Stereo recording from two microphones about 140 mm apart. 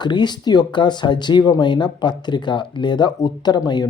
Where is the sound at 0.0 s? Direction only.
30° left (ahead or behind).